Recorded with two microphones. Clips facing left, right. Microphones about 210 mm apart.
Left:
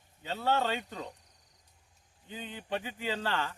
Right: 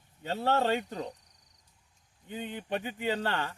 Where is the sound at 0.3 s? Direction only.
35° right (ahead or behind).